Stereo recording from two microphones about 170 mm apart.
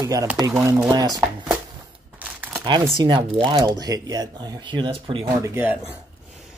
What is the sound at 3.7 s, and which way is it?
Speech, 20° right (ahead or behind).